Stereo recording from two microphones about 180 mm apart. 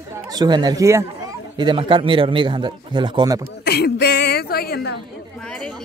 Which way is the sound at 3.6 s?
60° left (ahead or behind).